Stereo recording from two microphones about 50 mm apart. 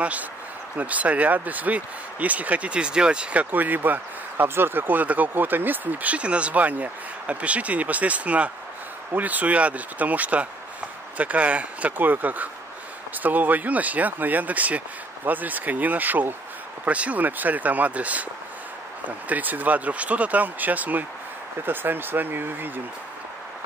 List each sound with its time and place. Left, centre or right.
0.0 s speech: right
3.5 s speech: right
6.1 s speech: right
12.0 s speech: right